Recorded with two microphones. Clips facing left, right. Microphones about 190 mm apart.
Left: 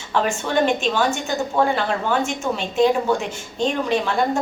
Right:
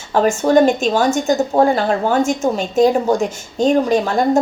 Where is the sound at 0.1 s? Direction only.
40° right (ahead or behind).